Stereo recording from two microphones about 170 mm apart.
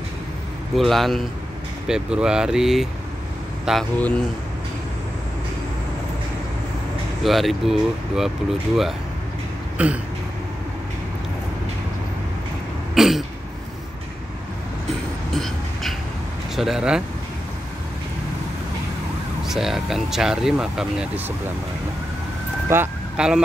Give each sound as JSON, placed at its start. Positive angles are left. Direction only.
{"t": 0.7, "sound": "speech", "side_deg": 0}
{"t": 7.2, "sound": "speech", "side_deg": 0}
{"t": 9.8, "sound": "throat clearing", "side_deg": -10}
{"t": 12.9, "sound": "throat clearing", "side_deg": 0}
{"t": 15.3, "sound": "a sound", "side_deg": 0}
{"t": 16.5, "sound": "speech", "side_deg": 0}
{"t": 19.4, "sound": "speech", "side_deg": 0}
{"t": 22.7, "sound": "speech", "side_deg": -10}